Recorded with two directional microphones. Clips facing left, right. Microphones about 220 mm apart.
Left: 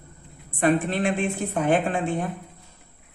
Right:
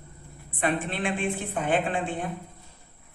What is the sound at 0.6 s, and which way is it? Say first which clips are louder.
A woman's voice: left 6 dB; 45° left (ahead or behind).